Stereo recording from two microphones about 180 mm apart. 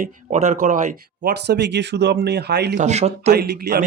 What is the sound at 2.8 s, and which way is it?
Speech, 40° right (ahead or behind).